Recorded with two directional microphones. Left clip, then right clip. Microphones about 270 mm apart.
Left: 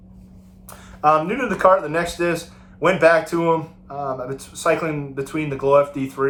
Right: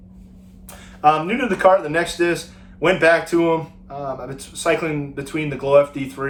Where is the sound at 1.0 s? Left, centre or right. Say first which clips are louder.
Right 1 dB; centre.